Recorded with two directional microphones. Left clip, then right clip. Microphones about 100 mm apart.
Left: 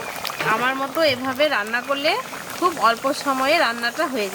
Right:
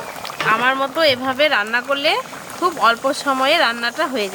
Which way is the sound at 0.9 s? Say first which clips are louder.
Right 3 dB; 40° right (ahead or behind).